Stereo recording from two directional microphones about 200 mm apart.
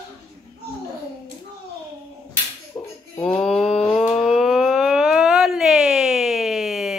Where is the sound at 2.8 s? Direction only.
15° left (ahead or behind).